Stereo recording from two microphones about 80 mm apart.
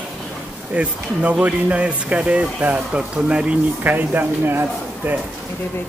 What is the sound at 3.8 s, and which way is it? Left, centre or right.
Speech, right.